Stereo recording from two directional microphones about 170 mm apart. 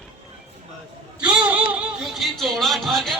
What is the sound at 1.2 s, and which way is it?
A man's voice, 5° right (ahead or behind).